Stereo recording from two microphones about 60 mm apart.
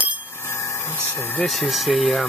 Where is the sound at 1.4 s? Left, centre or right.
Centre.